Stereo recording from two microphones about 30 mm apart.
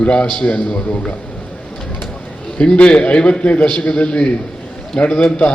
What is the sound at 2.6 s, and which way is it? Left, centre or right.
A man's voice, left.